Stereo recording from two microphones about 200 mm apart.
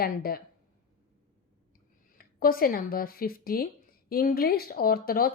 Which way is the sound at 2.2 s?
45° left (ahead or behind).